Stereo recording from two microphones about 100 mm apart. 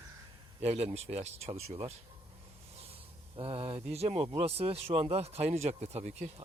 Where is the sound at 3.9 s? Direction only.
90° right.